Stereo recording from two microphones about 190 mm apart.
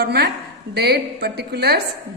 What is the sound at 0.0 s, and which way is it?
A woman's voice, 55° right (ahead or behind).